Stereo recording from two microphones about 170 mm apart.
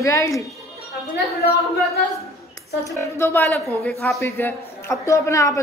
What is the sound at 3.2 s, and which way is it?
A man's voice, 15° left (ahead or behind).